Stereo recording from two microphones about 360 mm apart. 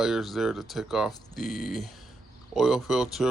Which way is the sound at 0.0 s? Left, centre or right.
Centre.